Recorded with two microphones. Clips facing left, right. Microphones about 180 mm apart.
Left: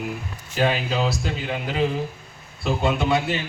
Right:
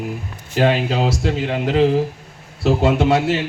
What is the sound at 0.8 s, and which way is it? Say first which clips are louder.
A man's voice: right 5 dB; 80° right.